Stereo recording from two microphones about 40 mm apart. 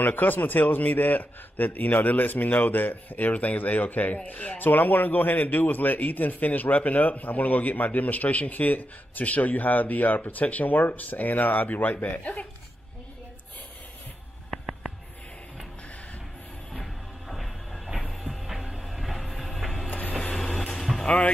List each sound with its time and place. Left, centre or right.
0.0 s speech: left
14.5 s a sound: centre
16.7 s music: centre
19.9 s vehicle: left
20.3 s vehicle: centre